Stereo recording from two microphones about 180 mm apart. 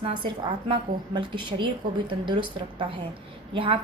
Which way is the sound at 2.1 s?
25° right (ahead or behind).